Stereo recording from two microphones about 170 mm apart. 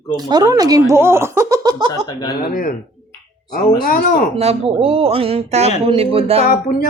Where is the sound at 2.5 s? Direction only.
55° left (ahead or behind).